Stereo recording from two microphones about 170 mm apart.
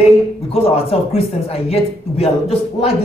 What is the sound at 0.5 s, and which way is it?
Speech, 35° left (ahead or behind).